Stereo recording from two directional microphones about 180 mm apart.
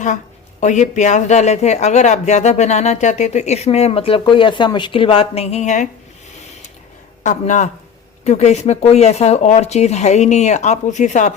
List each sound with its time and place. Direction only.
0.6 s speech: 40° left (ahead or behind)
7.2 s speech: 45° left (ahead or behind)